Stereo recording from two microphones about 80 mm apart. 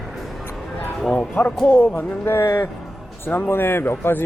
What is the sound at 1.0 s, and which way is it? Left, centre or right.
Speech, centre.